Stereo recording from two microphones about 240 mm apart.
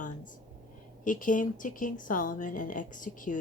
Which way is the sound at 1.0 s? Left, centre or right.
Left.